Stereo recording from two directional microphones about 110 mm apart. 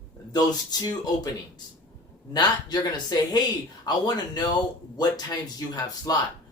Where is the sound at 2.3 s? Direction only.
40° left (ahead or behind).